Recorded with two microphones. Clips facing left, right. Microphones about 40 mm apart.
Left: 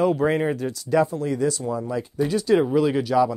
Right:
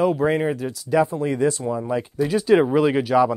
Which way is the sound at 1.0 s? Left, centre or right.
Right.